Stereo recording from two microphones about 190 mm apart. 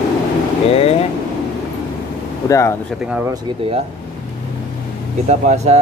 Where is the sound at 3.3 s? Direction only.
30° right (ahead or behind).